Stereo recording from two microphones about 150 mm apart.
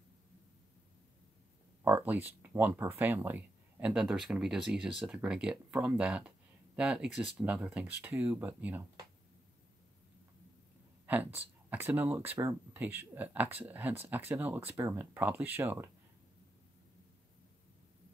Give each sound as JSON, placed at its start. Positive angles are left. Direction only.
{"t": 1.9, "sound": "speech", "side_deg": -10}
{"t": 11.1, "sound": "speech", "side_deg": -10}